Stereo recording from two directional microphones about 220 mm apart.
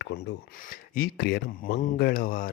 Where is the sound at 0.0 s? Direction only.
45° left (ahead or behind).